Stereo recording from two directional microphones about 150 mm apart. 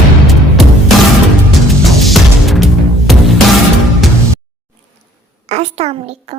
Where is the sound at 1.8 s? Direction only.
Centre (ahead or behind).